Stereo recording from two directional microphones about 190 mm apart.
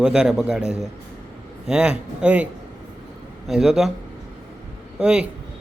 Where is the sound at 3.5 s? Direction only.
Centre (ahead or behind).